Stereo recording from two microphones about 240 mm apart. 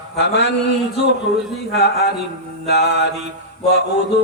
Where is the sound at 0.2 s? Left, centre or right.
Left.